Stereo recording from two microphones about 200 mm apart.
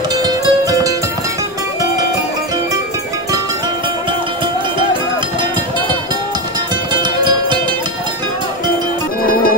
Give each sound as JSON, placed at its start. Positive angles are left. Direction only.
{"t": 0.2, "sound": "music", "side_deg": -20}
{"t": 6.9, "sound": "music", "side_deg": -20}
{"t": 9.2, "sound": "music", "side_deg": 45}